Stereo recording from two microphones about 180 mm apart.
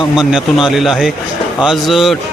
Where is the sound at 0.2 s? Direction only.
Centre (ahead or behind).